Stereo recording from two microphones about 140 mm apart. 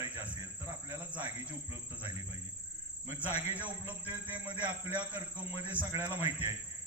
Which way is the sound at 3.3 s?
50° left (ahead or behind).